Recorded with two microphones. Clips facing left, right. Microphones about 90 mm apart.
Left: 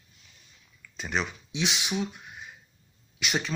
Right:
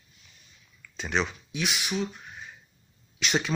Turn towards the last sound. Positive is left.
turn(degrees=5)  # may be behind; listen again after turning